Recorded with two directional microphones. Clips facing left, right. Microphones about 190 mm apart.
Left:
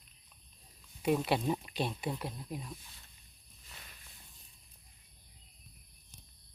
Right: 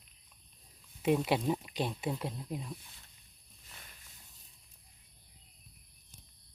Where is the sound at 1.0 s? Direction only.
15° right (ahead or behind).